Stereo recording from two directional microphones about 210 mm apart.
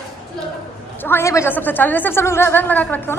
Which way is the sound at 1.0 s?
10° left (ahead or behind).